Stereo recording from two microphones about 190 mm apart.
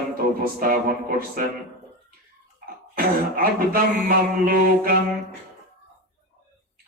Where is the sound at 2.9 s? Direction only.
50° right (ahead or behind).